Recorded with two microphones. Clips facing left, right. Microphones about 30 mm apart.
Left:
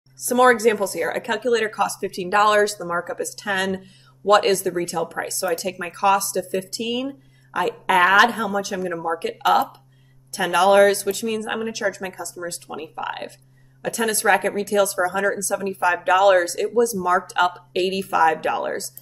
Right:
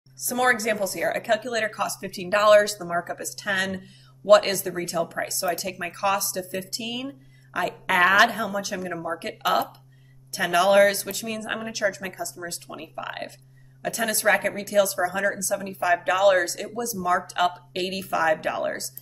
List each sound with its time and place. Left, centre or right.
0.3 s speech: centre